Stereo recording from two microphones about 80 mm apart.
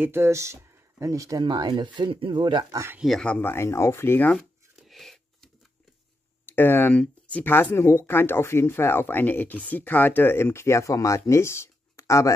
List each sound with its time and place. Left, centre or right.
0.0 s speech: right
1.4 s speech: right
3.3 s speech: left
4.7 s a sound: centre
6.4 s speech: left